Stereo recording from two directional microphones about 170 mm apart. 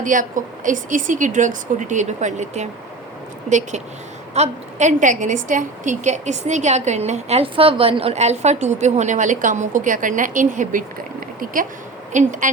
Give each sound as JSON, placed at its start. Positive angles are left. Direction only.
{"t": 0.0, "sound": "a woman's voice", "side_deg": -50}
{"t": 4.4, "sound": "a woman's voice", "side_deg": -45}
{"t": 12.1, "sound": "a woman's voice", "side_deg": -50}